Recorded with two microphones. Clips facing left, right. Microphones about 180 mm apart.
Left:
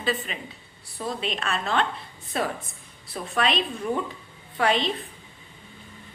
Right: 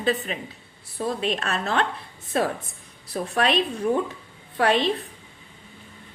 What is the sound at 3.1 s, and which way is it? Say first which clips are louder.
Speech: right 3 dB; 45° right (ahead or behind).